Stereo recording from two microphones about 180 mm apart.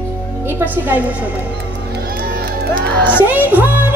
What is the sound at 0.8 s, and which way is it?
Speech, 10° right (ahead or behind).